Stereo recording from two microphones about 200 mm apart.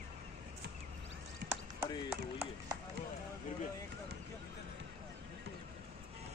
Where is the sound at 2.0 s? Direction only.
15° right (ahead or behind).